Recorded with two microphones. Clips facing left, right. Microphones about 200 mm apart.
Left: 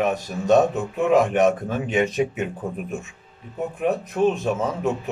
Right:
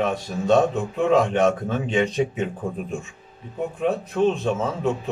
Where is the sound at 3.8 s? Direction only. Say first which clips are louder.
Even; 15° left (ahead or behind).